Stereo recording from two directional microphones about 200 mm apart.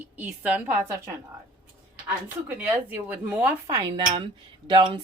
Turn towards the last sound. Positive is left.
turn(degrees=-20)  # may be behind; listen again after turning